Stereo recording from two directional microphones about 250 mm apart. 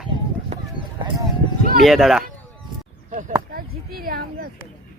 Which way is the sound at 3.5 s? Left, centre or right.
Right.